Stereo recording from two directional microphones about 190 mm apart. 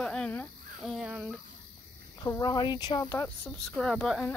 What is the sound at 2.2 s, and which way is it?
Speech, 20° left (ahead or behind).